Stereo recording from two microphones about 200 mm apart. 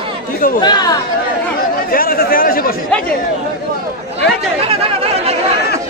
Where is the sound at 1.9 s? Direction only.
45° left (ahead or behind).